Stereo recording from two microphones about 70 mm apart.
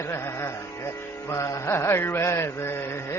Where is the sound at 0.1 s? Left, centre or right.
Left.